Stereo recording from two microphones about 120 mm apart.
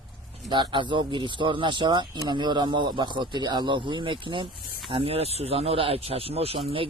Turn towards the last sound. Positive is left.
turn(degrees=-50)  # may be behind; listen again after turning